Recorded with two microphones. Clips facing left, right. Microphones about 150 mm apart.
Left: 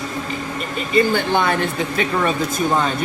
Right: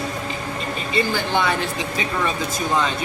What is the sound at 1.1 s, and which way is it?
A woman's voice, 55° left (ahead or behind).